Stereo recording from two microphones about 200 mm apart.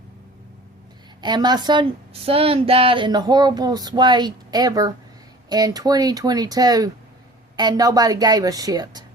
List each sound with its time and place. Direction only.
1.2 s a woman's voice: 20° right (ahead or behind)